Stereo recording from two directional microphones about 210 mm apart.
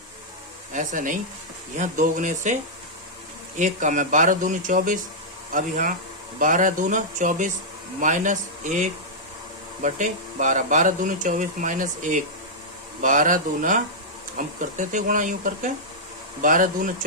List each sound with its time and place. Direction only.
0.7 s speech: 35° right (ahead or behind)
3.6 s speech: 35° right (ahead or behind)